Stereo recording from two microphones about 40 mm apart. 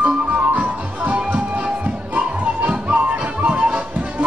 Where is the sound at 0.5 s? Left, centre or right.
Right.